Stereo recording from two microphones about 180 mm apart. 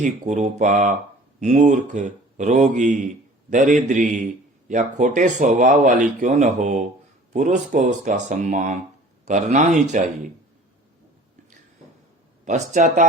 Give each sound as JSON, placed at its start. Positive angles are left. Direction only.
{"t": 0.0, "sound": "speech", "side_deg": -40}
{"t": 12.5, "sound": "speech", "side_deg": -40}